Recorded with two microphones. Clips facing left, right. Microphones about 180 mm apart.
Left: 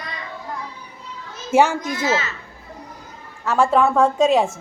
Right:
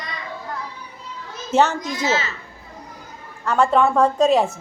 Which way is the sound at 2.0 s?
25° right (ahead or behind).